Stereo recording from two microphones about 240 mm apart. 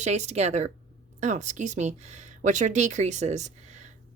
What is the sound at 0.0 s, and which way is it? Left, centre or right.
Speech, right.